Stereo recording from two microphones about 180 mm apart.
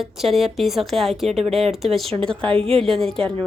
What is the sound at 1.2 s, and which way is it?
Speech, 35° right (ahead or behind).